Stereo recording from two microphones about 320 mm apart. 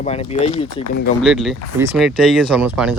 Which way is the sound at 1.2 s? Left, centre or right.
Centre.